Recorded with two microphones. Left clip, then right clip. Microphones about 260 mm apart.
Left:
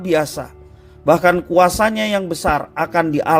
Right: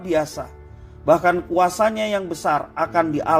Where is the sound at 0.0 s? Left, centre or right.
Left.